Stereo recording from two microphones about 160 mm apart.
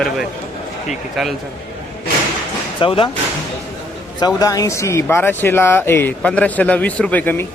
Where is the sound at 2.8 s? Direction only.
30° left (ahead or behind).